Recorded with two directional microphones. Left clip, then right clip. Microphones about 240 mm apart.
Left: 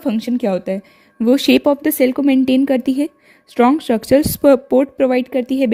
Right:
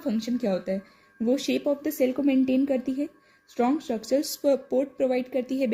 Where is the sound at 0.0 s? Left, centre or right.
Left.